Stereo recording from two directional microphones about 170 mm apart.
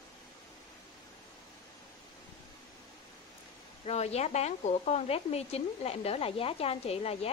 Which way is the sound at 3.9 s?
40° left (ahead or behind).